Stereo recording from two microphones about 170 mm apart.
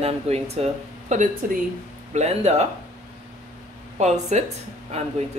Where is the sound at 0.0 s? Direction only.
40° right (ahead or behind).